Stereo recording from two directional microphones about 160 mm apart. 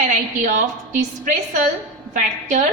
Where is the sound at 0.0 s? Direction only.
55° right (ahead or behind).